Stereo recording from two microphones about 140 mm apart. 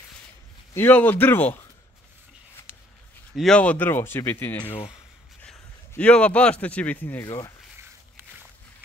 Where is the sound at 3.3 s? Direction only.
5° left (ahead or behind).